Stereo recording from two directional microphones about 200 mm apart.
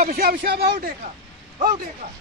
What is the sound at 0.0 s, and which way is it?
Speech, 45° right (ahead or behind).